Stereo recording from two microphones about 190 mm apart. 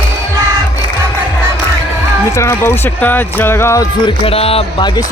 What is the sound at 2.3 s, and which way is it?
Speech, 15° left (ahead or behind).